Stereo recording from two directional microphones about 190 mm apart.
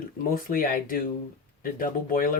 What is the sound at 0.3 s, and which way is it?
Speech, 50° left (ahead or behind).